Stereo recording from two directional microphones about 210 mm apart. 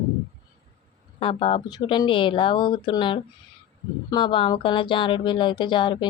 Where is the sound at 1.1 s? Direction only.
25° left (ahead or behind).